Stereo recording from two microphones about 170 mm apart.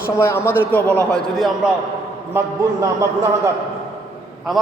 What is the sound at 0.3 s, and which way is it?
A man's voice, 15° left (ahead or behind).